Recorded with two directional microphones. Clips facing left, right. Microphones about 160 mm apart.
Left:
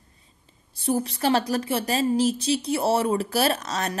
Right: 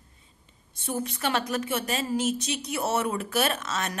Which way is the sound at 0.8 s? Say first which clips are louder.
Left 6 dB; 35° left (ahead or behind).